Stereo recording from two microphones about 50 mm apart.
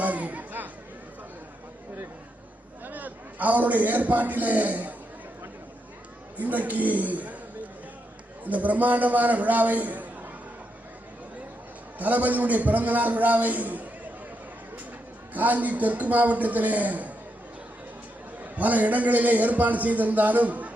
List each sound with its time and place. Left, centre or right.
0.0 s chatter: right
2.8 s a man's voice: right
6.3 s a man's voice: right
8.4 s a man's voice: right
11.9 s a man's voice: right
15.3 s a man's voice: right
18.5 s a man's voice: right